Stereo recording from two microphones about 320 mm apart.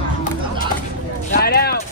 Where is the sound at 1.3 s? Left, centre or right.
Left.